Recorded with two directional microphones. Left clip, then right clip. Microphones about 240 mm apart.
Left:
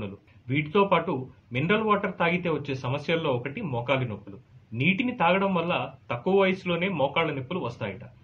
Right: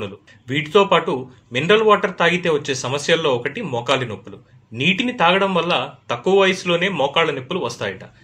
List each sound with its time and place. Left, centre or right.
0.0 s a man's voice: right